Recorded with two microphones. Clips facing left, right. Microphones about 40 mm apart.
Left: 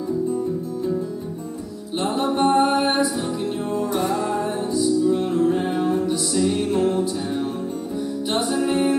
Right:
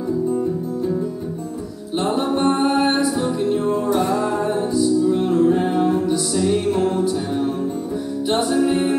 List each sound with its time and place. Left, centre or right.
2.0 s music: centre
8.3 s music: centre